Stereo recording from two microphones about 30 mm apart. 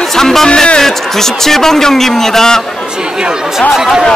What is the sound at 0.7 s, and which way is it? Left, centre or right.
A man's voice, centre.